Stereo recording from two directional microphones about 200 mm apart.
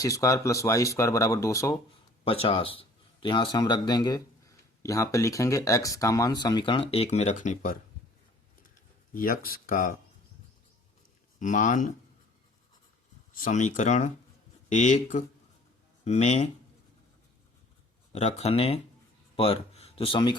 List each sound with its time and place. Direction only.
0.0 s speech: 15° left (ahead or behind)
2.2 s speech: 30° left (ahead or behind)
9.1 s speech: 45° left (ahead or behind)
11.3 s speech: 40° left (ahead or behind)
13.4 s speech: 40° left (ahead or behind)
18.1 s speech: 35° left (ahead or behind)